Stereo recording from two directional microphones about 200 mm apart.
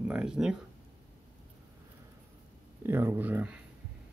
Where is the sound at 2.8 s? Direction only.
10° right (ahead or behind).